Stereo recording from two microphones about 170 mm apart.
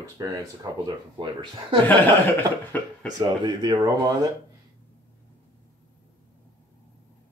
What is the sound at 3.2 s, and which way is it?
Speech, 25° right (ahead or behind).